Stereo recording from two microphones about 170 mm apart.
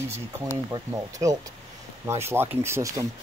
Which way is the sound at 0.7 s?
20° right (ahead or behind).